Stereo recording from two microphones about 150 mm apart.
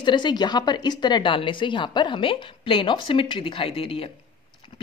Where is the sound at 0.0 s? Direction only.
30° left (ahead or behind).